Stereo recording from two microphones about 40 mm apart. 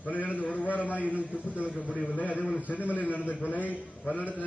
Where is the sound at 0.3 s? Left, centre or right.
Left.